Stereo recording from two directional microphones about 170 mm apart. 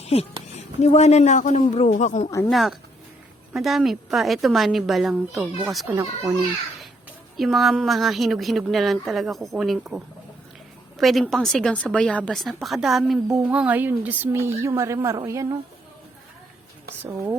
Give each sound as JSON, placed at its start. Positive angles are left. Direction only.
{"t": 0.0, "sound": "a woman's voice", "side_deg": 35}
{"t": 2.5, "sound": "a woman's voice", "side_deg": 0}
{"t": 5.9, "sound": "a child's voice", "side_deg": -20}
{"t": 7.3, "sound": "a woman's voice", "side_deg": 0}